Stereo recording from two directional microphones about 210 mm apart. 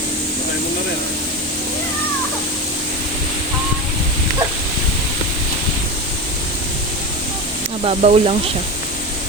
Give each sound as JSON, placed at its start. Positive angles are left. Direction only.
{"t": 7.9, "sound": "speech", "side_deg": -30}